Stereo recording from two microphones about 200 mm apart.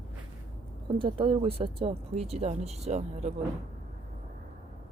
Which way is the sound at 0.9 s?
25° right (ahead or behind).